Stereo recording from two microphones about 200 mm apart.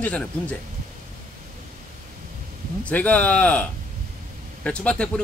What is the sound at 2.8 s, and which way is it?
Speech, 5° left (ahead or behind).